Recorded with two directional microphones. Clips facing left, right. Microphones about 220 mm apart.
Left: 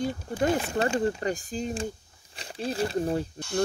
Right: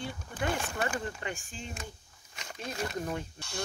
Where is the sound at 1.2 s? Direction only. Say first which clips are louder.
Left 10 dB; 35° left (ahead or behind).